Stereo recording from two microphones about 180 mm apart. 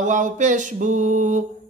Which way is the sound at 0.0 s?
45° right (ahead or behind).